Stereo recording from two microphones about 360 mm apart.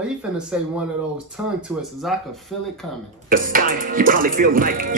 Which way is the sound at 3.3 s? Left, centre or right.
Right.